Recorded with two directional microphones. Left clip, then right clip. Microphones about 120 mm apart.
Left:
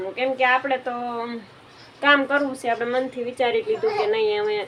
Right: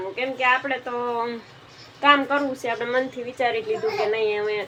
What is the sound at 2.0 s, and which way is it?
A woman's voice, 20° left (ahead or behind).